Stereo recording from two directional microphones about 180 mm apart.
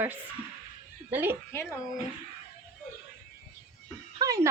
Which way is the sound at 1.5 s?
15° left (ahead or behind).